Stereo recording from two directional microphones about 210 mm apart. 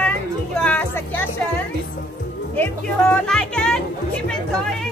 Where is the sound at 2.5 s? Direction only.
10° left (ahead or behind).